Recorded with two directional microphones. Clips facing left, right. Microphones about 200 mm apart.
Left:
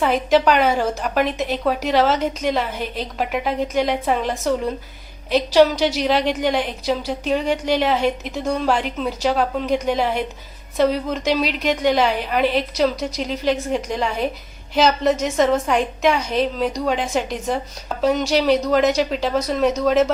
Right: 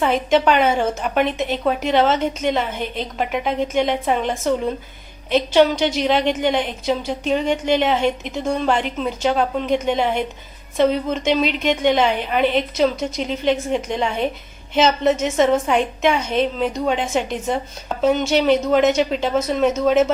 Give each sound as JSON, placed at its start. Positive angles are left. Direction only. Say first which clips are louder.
{"t": 0.0, "sound": "a woman's voice", "louder": "even", "side_deg": 0}